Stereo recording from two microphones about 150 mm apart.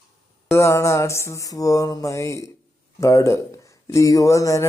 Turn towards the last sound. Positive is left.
turn(degrees=20)  # may be behind; listen again after turning